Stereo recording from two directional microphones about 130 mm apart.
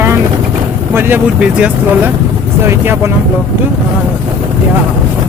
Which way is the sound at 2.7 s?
20° right (ahead or behind).